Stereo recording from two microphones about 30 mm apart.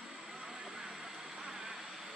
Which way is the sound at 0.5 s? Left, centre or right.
Centre.